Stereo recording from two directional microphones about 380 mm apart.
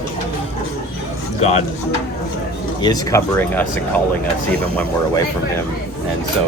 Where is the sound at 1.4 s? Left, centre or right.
Centre.